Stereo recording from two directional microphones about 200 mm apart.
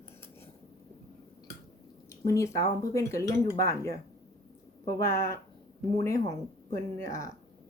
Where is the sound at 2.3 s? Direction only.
15° left (ahead or behind).